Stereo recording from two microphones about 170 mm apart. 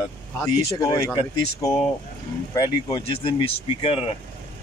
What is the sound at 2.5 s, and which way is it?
Speech, 25° left (ahead or behind).